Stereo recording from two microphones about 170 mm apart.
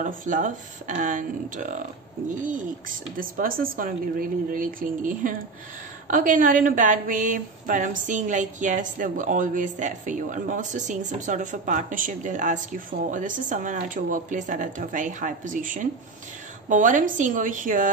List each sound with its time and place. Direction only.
0.0 s a woman's voice: 50° right (ahead or behind)